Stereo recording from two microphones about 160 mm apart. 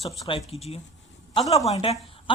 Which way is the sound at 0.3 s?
35° left (ahead or behind).